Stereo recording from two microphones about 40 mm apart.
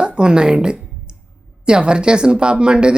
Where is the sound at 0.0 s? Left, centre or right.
Right.